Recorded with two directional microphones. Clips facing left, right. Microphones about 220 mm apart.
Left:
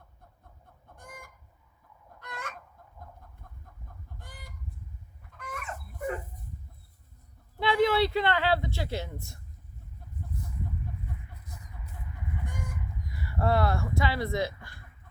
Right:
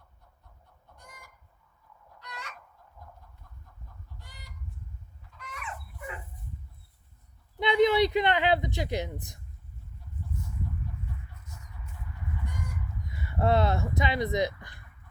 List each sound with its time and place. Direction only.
0.9 s chicken: 50° left (ahead or behind)
2.1 s a sound: 50° left (ahead or behind)
4.2 s fowl: 50° left (ahead or behind)
5.3 s dog: 50° left (ahead or behind)
7.6 s speech: 20° right (ahead or behind)
10.9 s chicken: 50° left (ahead or behind)
11.4 s chicken: 35° left (ahead or behind)
13.1 s speech: 20° right (ahead or behind)